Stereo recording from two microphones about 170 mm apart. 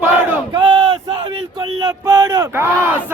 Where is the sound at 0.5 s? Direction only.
30° right (ahead or behind).